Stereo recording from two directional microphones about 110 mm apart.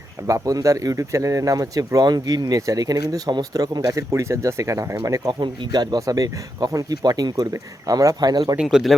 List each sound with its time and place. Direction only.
0.3 s speech: 30° right (ahead or behind)
5.3 s speech: 40° right (ahead or behind)
8.5 s speech: 5° right (ahead or behind)